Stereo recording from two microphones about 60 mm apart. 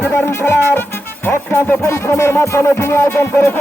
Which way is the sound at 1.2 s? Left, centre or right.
Left.